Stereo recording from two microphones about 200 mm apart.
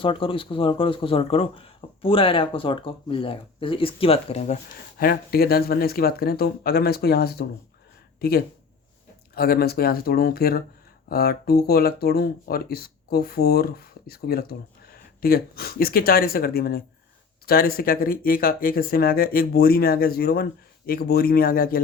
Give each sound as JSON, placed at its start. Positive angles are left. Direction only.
{"t": 0.0, "sound": "speech", "side_deg": 25}
{"t": 4.9, "sound": "speech", "side_deg": 50}